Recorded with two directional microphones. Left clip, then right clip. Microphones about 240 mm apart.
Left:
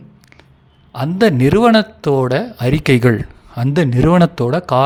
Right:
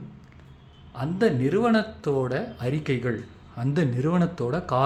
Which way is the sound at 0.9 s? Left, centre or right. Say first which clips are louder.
Left 10 dB; left.